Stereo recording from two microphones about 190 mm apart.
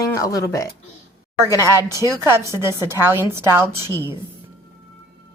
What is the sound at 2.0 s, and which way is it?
Speech, 20° left (ahead or behind).